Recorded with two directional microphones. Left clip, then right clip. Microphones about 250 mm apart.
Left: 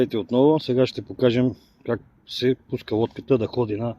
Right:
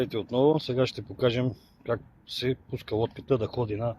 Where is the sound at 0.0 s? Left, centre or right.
Left.